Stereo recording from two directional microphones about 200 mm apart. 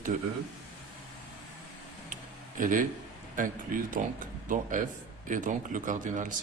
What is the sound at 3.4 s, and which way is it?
Speech, 40° right (ahead or behind).